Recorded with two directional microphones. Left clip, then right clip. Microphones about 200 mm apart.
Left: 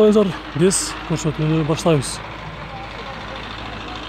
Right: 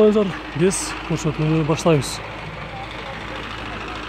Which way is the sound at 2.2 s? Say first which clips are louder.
Even; 50° right (ahead or behind).